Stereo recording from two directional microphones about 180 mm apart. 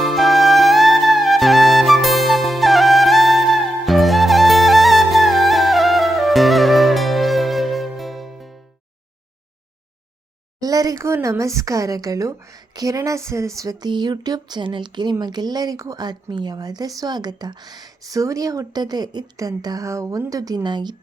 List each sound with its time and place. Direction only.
0.0 s music: centre (ahead or behind)
10.6 s speech: 20° right (ahead or behind)